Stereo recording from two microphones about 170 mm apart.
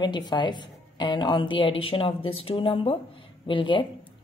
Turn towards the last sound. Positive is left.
turn(degrees=30)  # may be behind; listen again after turning